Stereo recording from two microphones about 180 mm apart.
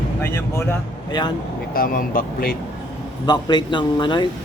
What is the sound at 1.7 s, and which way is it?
Speech, 50° left (ahead or behind).